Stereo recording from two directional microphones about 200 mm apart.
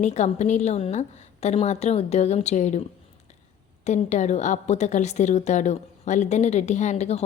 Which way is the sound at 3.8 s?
35° left (ahead or behind).